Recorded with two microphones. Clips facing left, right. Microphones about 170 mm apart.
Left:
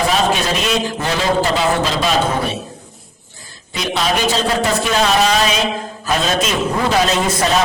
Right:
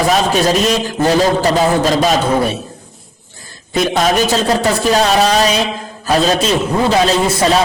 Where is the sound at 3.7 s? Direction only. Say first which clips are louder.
Right 6 dB; 45° right (ahead or behind).